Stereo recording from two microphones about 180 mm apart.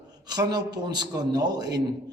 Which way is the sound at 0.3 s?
20° right (ahead or behind).